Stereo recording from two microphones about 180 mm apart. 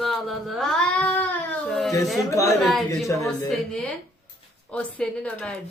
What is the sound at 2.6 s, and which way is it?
Speech, centre (ahead or behind).